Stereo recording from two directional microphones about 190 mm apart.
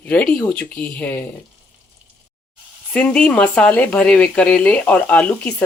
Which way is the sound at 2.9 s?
5° left (ahead or behind).